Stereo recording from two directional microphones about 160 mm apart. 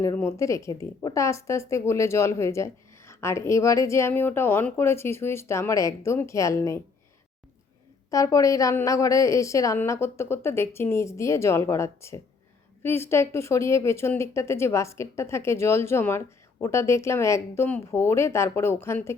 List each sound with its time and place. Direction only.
0.0 s a woman's voice: 20° left (ahead or behind)
8.1 s a woman's voice: 20° left (ahead or behind)